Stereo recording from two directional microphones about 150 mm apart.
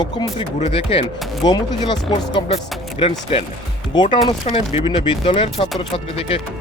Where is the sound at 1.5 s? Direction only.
30° left (ahead or behind).